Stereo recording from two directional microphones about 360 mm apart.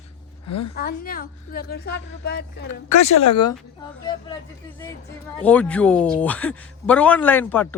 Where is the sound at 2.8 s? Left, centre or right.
Left.